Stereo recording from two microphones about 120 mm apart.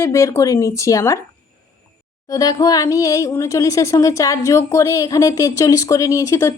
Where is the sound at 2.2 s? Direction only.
30° left (ahead or behind).